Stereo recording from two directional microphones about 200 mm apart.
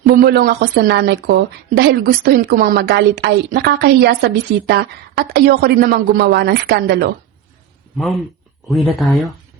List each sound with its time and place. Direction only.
0.0 s a woman's voice: 50° right (ahead or behind)
7.9 s speech: centre (ahead or behind)